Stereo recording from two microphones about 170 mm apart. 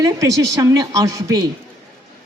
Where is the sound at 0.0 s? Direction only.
20° right (ahead or behind).